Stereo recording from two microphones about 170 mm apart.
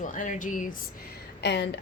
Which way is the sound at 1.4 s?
80° left.